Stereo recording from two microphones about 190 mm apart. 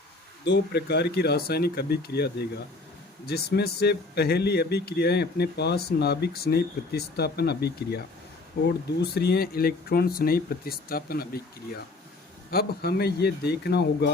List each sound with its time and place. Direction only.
0.4 s speech: 65° left (ahead or behind)
12.5 s speech: 55° left (ahead or behind)